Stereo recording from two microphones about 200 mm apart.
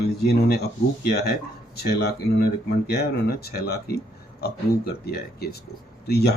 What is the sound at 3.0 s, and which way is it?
Speech, 50° left (ahead or behind).